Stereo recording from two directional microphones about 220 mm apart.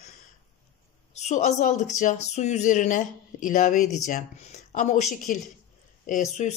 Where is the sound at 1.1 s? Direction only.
30° left (ahead or behind).